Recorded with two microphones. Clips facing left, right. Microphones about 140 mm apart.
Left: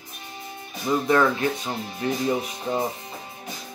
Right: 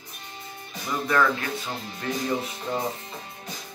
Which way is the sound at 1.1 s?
25° left (ahead or behind).